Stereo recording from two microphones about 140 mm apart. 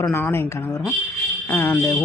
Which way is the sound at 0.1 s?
15° left (ahead or behind).